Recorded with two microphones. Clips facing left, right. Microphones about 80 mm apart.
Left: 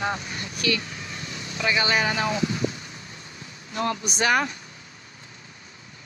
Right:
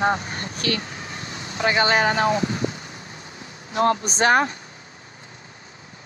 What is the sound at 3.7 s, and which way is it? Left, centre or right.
Speech, right.